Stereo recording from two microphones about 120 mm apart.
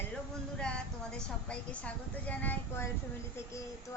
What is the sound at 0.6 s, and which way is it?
A woman's voice, 5° left (ahead or behind).